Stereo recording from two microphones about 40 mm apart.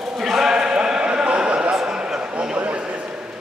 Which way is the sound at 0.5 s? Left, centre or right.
Centre.